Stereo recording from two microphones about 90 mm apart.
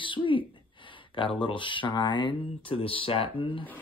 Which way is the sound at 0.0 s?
65° left (ahead or behind).